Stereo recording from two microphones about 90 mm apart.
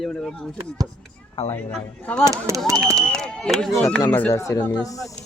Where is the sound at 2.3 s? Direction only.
35° right (ahead or behind).